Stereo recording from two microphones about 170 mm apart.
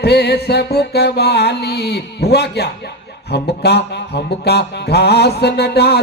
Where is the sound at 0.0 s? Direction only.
75° left (ahead or behind).